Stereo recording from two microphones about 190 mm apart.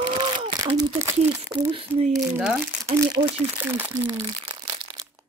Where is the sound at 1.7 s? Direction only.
30° right (ahead or behind).